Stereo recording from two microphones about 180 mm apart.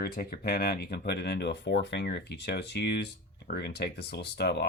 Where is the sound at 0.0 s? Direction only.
55° left (ahead or behind).